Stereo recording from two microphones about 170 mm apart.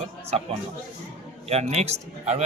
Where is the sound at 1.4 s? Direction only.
40° right (ahead or behind).